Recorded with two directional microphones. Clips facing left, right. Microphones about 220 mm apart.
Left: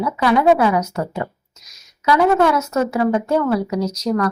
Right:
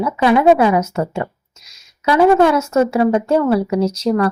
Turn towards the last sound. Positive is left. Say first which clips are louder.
# right 4 dB
turn(degrees=-30)  # may be behind; listen again after turning